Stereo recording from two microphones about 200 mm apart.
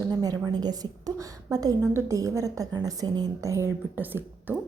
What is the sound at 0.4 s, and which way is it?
A woman's voice, 20° right (ahead or behind).